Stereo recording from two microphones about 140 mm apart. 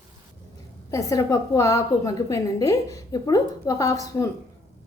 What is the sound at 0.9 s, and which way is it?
A woman's voice, 25° left (ahead or behind).